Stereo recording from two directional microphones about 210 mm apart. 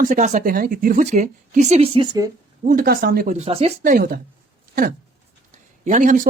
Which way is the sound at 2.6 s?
45° right (ahead or behind).